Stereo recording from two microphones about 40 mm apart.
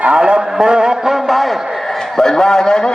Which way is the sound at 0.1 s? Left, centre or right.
Right.